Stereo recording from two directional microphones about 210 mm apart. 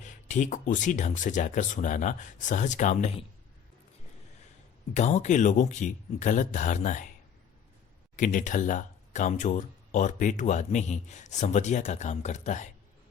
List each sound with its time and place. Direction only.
0.0 s speech: 35° left (ahead or behind)
4.9 s speech: 35° left (ahead or behind)
8.1 s speech: 40° left (ahead or behind)